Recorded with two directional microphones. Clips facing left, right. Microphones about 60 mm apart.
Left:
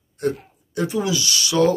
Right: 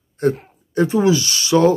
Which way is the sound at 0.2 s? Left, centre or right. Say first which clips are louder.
Right 5 dB; right.